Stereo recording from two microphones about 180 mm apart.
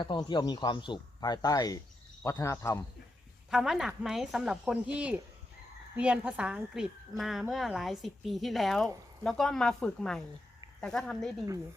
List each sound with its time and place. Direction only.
0.0 s speech: 25° left (ahead or behind)
3.5 s a woman's voice: centre (ahead or behind)